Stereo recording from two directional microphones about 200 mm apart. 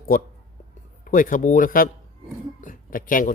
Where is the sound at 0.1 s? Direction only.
45° left (ahead or behind).